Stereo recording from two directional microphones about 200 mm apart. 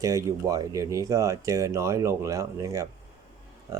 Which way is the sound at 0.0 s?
15° right (ahead or behind).